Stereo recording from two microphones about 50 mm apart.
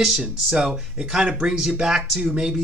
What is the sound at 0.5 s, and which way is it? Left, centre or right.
Speech, centre.